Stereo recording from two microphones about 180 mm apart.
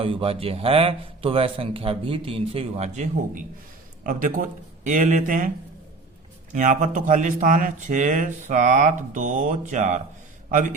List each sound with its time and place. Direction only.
0.0 s a man's voice: 30° right (ahead or behind); by 5.5 s 45° right (ahead or behind)
6.5 s speech: 45° right (ahead or behind)